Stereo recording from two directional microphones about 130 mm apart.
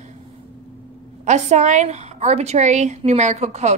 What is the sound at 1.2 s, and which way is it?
Speech, 65° right (ahead or behind).